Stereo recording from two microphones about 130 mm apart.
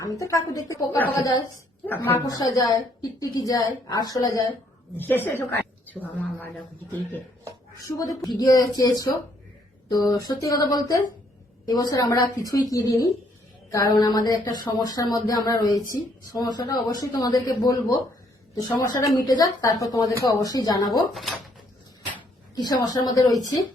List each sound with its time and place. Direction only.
0.0 s a woman's voice: 25° left (ahead or behind)
1.9 s a woman's voice: 15° left (ahead or behind)
2.2 s a woman's voice: 30° left (ahead or behind)
4.9 s a woman's voice: 15° left (ahead or behind)
7.8 s a woman's voice: 25° left (ahead or behind)
22.5 s a woman's voice: 30° left (ahead or behind)